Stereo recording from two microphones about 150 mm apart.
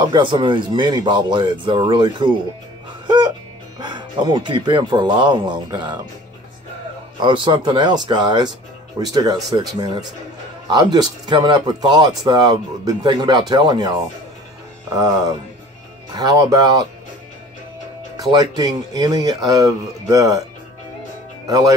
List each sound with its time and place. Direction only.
0.0 s speech: 30° right (ahead or behind)
3.1 s music: 30° right (ahead or behind)
3.8 s speech: 30° right (ahead or behind)
7.2 s speech: 30° right (ahead or behind)
18.1 s speech: 25° right (ahead or behind)
21.5 s speech: 25° right (ahead or behind)